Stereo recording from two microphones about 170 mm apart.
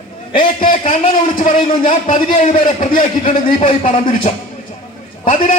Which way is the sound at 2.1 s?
30° left (ahead or behind).